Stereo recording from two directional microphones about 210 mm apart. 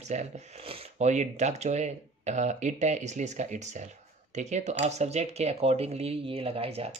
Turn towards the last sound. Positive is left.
turn(degrees=-30)  # may be behind; listen again after turning